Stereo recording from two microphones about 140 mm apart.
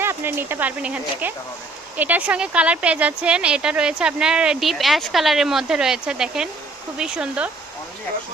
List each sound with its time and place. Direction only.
0.0 s speech: 15° right (ahead or behind)